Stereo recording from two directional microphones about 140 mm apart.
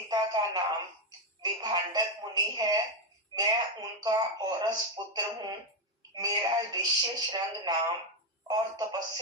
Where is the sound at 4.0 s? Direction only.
30° right (ahead or behind).